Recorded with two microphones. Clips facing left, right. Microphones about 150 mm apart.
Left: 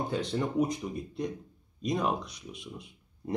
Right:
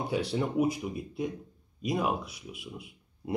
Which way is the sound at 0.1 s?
10° right (ahead or behind).